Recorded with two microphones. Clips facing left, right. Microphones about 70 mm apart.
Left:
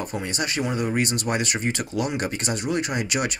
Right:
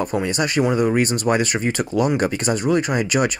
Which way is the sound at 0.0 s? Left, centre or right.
Right.